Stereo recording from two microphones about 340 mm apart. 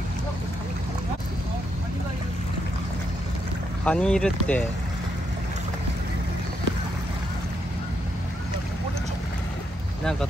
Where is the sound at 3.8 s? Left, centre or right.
Centre.